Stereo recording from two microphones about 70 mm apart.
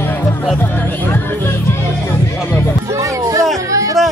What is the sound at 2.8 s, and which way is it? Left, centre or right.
Music, right.